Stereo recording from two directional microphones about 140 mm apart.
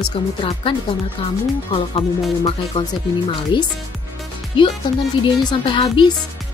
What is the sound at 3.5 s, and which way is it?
Speech, 35° left (ahead or behind).